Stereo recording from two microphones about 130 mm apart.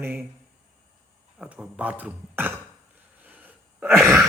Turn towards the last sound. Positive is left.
turn(degrees=-5)  # may be behind; listen again after turning